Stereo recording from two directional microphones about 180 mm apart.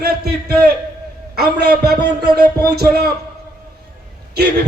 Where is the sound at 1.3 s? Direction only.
65° right (ahead or behind).